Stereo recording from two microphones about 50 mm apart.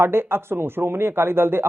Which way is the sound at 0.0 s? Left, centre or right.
Right.